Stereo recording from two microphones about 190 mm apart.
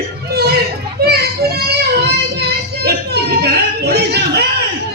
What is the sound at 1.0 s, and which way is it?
Child singing, 55° right (ahead or behind).